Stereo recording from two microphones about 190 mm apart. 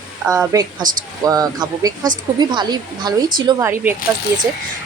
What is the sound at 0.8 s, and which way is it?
Speech, 45° right (ahead or behind).